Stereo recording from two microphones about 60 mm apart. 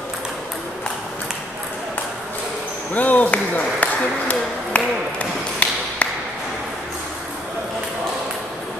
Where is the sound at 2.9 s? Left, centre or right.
Left.